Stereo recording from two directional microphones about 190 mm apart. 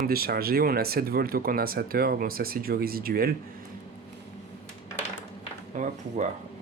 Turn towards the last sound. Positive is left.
turn(degrees=-40)  # may be behind; listen again after turning